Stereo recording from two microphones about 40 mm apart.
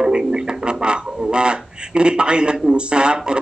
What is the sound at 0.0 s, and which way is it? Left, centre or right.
Speech, centre.